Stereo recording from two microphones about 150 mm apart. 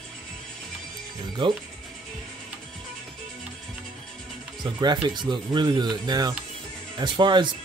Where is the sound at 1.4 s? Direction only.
30° right (ahead or behind).